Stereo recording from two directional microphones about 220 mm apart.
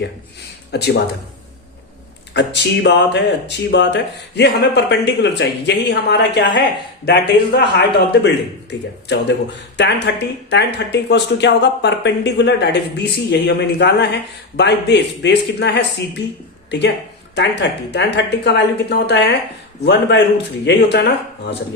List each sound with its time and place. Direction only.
0.7 s speech: 50° left (ahead or behind)
2.3 s speech: 55° left (ahead or behind)